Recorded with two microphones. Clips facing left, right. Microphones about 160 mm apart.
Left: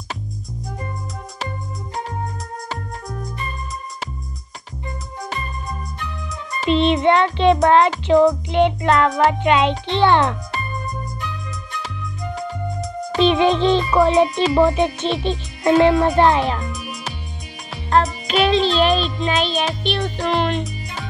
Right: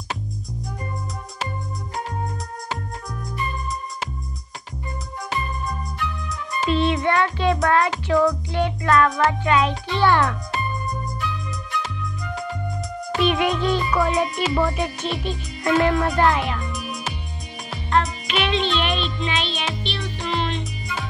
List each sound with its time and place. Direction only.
6.7 s speech: 20° left (ahead or behind)
12.4 s music: centre (ahead or behind)
13.2 s speech: 25° left (ahead or behind)
18.2 s music: 40° left (ahead or behind)